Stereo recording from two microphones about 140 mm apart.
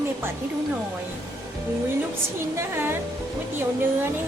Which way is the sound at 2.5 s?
20° right (ahead or behind).